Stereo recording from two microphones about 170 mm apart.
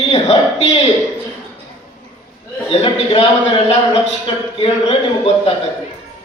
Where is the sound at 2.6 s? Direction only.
35° left (ahead or behind).